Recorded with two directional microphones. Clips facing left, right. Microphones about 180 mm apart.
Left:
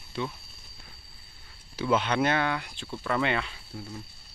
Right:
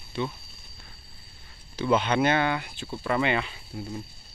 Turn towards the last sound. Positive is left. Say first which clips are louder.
# right 2 dB
turn(degrees=-5)  # may be behind; listen again after turning